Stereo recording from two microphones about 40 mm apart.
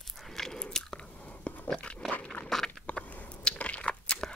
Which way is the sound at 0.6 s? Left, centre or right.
Left.